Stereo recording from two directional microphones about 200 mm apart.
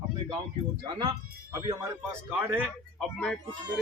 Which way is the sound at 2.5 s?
Centre (ahead or behind).